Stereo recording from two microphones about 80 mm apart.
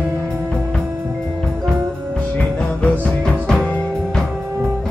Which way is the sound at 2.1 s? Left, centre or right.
Centre.